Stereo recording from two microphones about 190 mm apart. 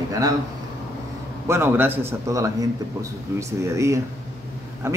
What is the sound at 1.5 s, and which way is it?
Speech, 10° right (ahead or behind).